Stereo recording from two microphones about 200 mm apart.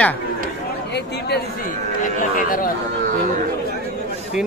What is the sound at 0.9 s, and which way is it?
Speech, 55° left (ahead or behind).